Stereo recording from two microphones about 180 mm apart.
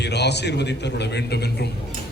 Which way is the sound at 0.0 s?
70° left (ahead or behind).